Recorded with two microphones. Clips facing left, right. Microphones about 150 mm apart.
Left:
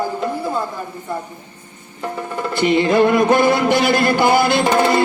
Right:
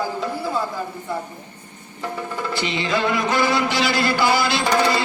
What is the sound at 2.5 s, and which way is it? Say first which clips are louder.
Music: left 10 dB; 55° left (ahead or behind).